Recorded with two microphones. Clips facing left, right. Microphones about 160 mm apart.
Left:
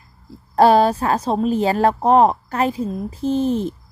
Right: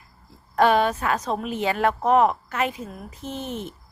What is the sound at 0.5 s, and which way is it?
A woman's voice, 35° left (ahead or behind).